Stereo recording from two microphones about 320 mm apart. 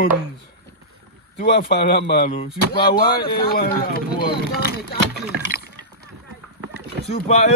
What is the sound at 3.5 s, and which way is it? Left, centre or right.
Speech, left.